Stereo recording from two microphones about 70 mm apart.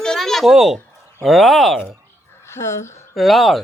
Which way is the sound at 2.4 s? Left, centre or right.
Left.